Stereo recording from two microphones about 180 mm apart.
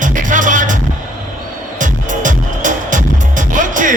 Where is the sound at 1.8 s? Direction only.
45° right (ahead or behind).